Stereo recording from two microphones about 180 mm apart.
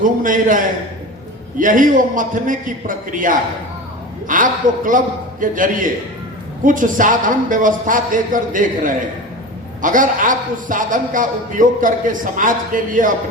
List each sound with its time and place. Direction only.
0.0 s a man's voice: 45° right (ahead or behind)